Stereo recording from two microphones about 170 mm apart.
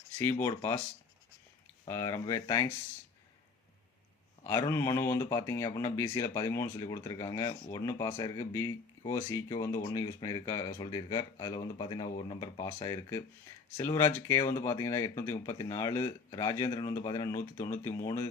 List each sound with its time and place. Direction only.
0.2 s speech: 15° left (ahead or behind)
1.9 s speech: 20° left (ahead or behind)
4.4 s speech: 15° left (ahead or behind)